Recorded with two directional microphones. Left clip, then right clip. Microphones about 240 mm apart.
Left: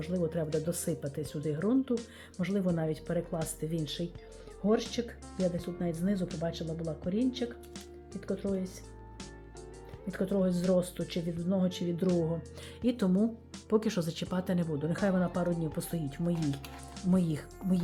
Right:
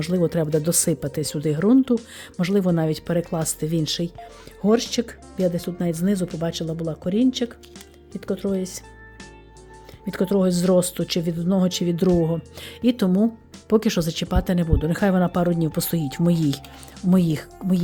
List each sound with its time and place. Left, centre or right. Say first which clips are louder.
0.0 s speech: right 11 dB; right
8.1 s speech: right 10 dB; centre
8.5 s speech: right 10 dB; right
10.1 s speech: right 10 dB; right